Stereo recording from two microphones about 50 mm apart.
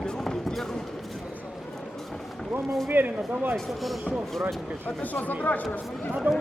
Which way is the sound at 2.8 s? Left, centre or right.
Right.